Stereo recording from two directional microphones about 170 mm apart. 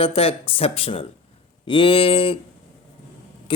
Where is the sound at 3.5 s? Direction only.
30° left (ahead or behind).